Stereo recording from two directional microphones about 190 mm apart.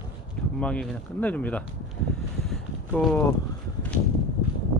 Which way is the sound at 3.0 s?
5° left (ahead or behind).